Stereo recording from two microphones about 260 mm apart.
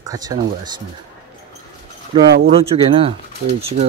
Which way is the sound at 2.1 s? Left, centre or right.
Right.